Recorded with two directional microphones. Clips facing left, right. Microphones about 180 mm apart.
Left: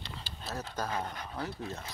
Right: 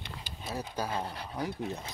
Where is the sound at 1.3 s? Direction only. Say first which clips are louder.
Right 4 dB; 15° right (ahead or behind).